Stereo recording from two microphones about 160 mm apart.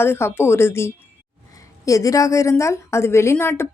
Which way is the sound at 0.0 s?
15° left (ahead or behind).